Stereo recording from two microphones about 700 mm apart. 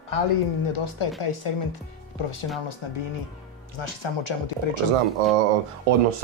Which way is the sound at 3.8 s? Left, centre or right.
Left.